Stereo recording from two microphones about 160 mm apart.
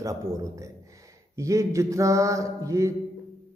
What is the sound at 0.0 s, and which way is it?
A man's voice, 20° right (ahead or behind).